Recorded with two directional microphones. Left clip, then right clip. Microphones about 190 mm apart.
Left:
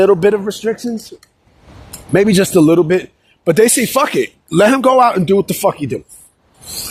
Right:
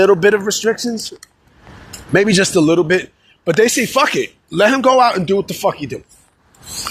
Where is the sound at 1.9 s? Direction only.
30° left (ahead or behind); by 6.0 s 50° left (ahead or behind).